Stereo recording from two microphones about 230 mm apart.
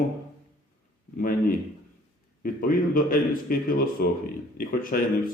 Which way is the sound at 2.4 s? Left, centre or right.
Left.